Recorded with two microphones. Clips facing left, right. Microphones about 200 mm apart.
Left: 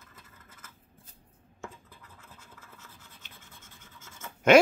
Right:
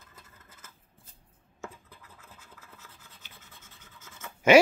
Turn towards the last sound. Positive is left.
turn(degrees=-5)  # may be behind; listen again after turning